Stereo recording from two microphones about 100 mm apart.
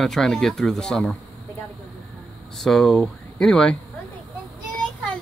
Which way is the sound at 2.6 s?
Centre (ahead or behind).